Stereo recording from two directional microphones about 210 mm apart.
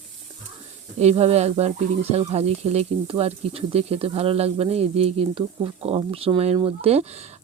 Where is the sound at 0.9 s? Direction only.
30° right (ahead or behind).